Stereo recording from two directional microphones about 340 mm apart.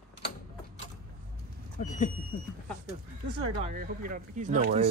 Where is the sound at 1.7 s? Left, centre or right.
Left.